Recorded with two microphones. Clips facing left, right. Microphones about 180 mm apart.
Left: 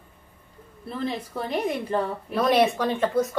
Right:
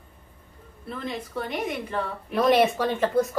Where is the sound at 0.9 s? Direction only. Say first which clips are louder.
Left 4 dB; 30° left (ahead or behind).